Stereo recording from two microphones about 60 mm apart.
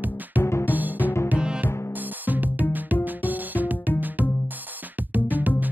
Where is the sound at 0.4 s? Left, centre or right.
Left.